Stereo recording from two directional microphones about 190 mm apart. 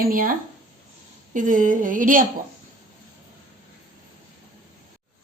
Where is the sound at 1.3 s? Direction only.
45° right (ahead or behind).